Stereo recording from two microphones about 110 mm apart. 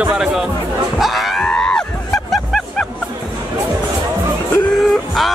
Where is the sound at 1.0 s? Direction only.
Centre (ahead or behind).